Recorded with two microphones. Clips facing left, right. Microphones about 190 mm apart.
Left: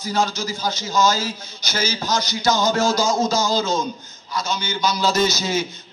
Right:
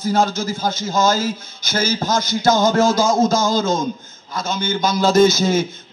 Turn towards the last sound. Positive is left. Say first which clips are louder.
# right 7 dB
turn(degrees=-50)  # may be behind; listen again after turning